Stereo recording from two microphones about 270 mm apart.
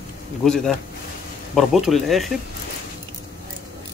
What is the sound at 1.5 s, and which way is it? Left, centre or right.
Speech, centre.